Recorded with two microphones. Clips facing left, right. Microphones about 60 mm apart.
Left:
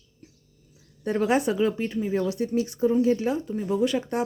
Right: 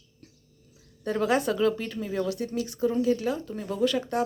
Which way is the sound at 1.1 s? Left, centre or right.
Left.